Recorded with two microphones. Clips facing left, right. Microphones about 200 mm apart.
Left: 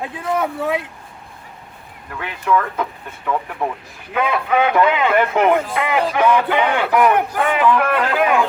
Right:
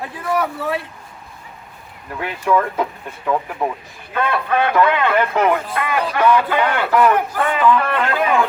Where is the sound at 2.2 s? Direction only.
15° right (ahead or behind).